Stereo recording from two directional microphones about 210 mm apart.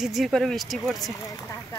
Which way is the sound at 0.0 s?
Centre (ahead or behind).